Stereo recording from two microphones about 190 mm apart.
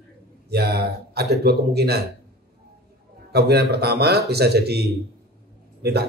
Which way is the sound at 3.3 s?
60° right (ahead or behind).